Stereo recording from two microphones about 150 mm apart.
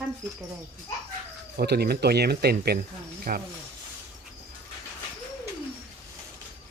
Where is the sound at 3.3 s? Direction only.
75° right (ahead or behind).